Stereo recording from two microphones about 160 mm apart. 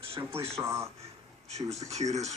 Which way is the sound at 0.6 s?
15° right (ahead or behind).